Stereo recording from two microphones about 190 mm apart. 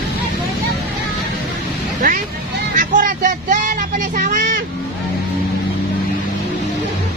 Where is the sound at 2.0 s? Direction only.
45° right (ahead or behind).